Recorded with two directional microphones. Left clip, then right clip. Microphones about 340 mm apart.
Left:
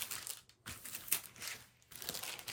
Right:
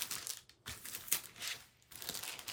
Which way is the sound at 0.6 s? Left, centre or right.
Centre.